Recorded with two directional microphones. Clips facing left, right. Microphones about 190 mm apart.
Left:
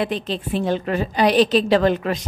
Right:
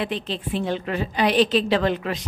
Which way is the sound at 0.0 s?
40° left (ahead or behind).